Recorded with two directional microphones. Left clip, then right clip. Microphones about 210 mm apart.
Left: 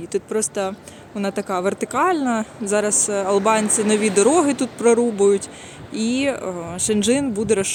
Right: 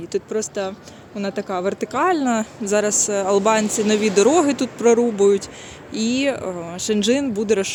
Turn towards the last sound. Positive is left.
turn(degrees=0)  # may be behind; listen again after turning